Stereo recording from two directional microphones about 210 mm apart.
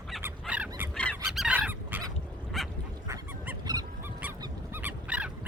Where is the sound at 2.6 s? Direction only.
Centre (ahead or behind).